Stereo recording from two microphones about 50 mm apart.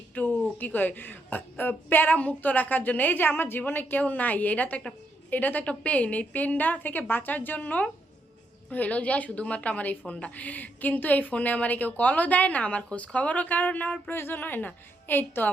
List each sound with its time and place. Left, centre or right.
0.1 s a sound: left
0.6 s a woman's voice: left
14.1 s a woman's voice: left